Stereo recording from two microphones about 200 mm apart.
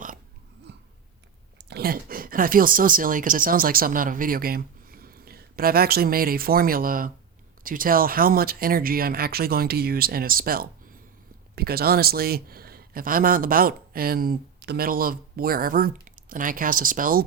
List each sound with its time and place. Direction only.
1.5 s speech: 55° right (ahead or behind)